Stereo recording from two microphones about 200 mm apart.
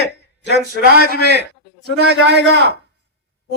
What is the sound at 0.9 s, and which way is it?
A man's voice, 50° right (ahead or behind).